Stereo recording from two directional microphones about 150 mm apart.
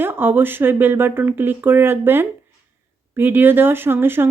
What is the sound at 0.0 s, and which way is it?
Speech, 15° right (ahead or behind).